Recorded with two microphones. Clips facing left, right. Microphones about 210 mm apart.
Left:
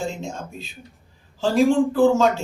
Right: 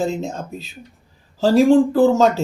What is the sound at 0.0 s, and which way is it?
Speech, 35° right (ahead or behind).